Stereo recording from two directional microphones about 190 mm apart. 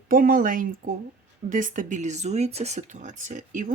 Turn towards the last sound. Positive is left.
turn(degrees=-40)  # may be behind; listen again after turning